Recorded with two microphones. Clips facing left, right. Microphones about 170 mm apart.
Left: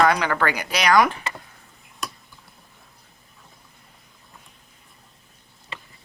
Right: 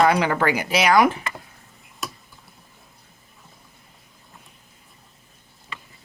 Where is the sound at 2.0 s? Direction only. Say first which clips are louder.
Even; centre (ahead or behind).